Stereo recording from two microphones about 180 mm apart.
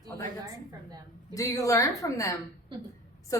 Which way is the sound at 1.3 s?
20° left (ahead or behind).